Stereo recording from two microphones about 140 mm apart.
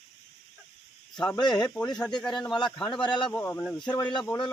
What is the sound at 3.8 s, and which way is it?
Speech, 30° left (ahead or behind).